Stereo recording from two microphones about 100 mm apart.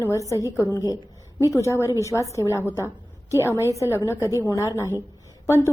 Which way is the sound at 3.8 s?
30° left (ahead or behind).